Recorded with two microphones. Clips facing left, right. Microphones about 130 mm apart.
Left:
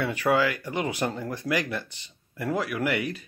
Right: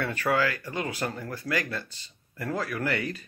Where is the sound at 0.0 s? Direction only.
15° left (ahead or behind).